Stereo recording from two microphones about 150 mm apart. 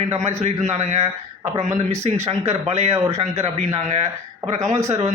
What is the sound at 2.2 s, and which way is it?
Speech, 15° right (ahead or behind).